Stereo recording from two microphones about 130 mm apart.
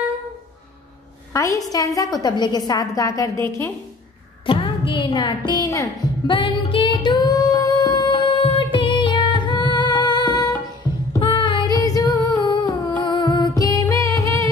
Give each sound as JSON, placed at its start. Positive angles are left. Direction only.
{"t": 1.3, "sound": "a woman's voice", "side_deg": 25}
{"t": 4.5, "sound": "a woman's voice", "side_deg": 40}
{"t": 6.2, "sound": "singing", "side_deg": 40}
{"t": 8.7, "sound": "music", "side_deg": 40}
{"t": 11.1, "sound": "child singing", "side_deg": 40}
{"t": 12.3, "sound": "humming", "side_deg": 35}